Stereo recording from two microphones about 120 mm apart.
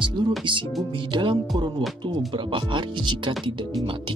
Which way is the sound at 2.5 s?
45° right (ahead or behind).